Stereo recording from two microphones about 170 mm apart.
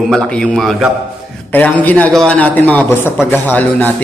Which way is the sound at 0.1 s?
5° left (ahead or behind).